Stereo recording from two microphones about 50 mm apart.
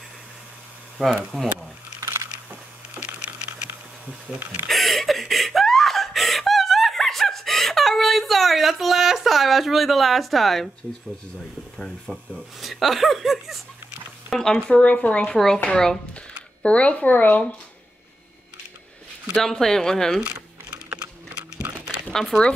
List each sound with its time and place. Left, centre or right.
1.0 s speech: centre
2.0 s a sound: right
4.6 s laughter: centre
12.1 s speech: centre
14.3 s speech: centre
14.7 s speech: left
15.3 s speech: centre
16.6 s speech: left
19.3 s speech: centre
21.6 s a sound: right